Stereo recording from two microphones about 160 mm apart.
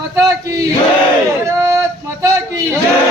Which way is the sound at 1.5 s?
20° right (ahead or behind).